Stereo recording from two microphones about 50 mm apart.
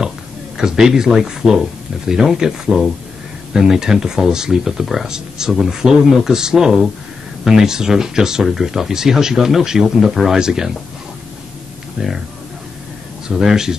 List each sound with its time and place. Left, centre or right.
0.6 s speech: centre
12.0 s speech: centre
13.3 s speech: centre